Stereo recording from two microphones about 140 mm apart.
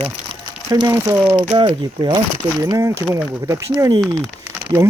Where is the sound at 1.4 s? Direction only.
35° right (ahead or behind).